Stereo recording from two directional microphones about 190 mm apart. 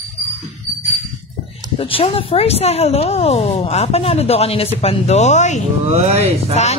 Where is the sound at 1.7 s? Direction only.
30° left (ahead or behind).